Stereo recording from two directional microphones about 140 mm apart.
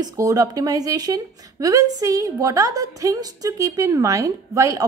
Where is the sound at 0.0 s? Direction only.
25° right (ahead or behind).